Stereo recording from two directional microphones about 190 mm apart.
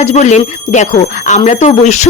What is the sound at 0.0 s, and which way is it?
Speech, 35° left (ahead or behind).